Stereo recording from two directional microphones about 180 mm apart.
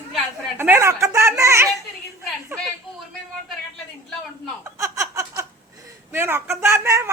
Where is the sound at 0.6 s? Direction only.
15° right (ahead or behind).